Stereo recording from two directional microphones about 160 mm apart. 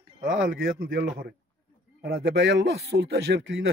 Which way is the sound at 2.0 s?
90° right.